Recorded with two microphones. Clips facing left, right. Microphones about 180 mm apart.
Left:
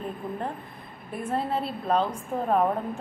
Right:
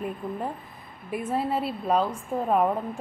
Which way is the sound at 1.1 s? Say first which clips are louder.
Right 1 dB; 5° right (ahead or behind).